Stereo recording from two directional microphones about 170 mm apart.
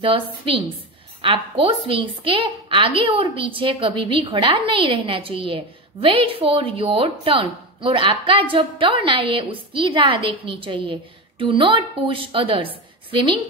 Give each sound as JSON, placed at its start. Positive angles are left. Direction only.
{"t": 0.0, "sound": "a woman's voice", "side_deg": -30}